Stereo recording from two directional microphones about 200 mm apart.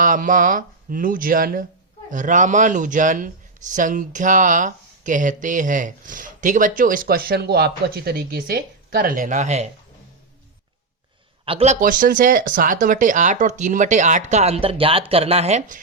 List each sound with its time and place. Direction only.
0.0 s speech: 40° right (ahead or behind)
11.4 s speech: 30° right (ahead or behind)